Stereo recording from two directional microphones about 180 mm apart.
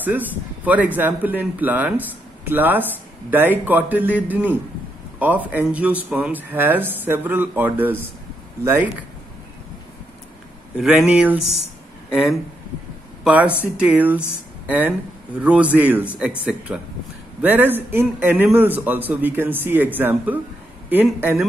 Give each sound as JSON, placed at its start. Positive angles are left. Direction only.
{"t": 0.0, "sound": "speech", "side_deg": -10}
{"t": 10.8, "sound": "speech", "side_deg": -5}
{"t": 13.2, "sound": "speech", "side_deg": -10}